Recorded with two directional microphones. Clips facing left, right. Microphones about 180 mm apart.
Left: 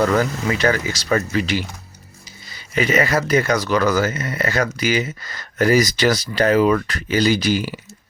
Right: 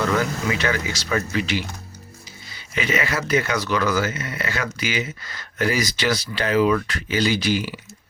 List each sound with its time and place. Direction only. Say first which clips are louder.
0.2 s speech: left 4 dB; 40° left (ahead or behind)